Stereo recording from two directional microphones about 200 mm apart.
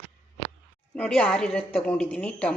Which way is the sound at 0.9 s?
5° left (ahead or behind).